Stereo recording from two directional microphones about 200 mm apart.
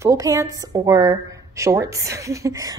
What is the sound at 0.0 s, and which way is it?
A woman's voice, 15° right (ahead or behind).